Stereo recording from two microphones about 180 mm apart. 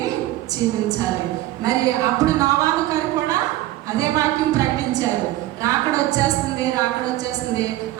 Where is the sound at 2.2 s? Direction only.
20° right (ahead or behind).